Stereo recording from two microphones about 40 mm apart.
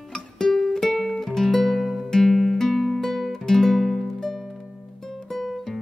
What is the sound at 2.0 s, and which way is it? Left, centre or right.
Music, centre.